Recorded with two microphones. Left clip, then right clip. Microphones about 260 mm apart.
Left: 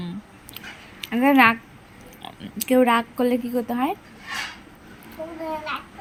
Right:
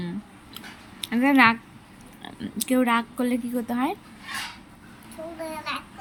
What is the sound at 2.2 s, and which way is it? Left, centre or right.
Speech, right.